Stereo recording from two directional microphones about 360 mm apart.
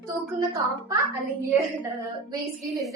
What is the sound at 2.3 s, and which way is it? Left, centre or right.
Speech, centre.